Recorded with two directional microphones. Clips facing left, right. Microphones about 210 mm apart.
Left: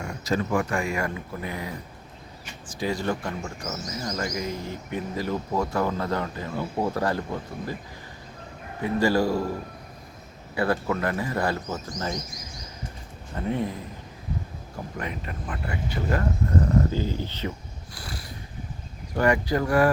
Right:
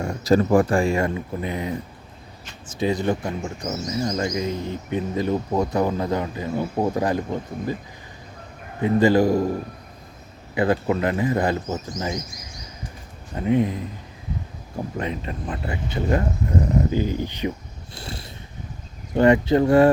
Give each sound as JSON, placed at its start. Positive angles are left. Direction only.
{"t": 0.0, "sound": "speech", "side_deg": -35}
{"t": 8.8, "sound": "speech", "side_deg": -20}
{"t": 10.5, "sound": "speech", "side_deg": -20}
{"t": 13.3, "sound": "speech", "side_deg": -15}
{"t": 14.9, "sound": "speech", "side_deg": -25}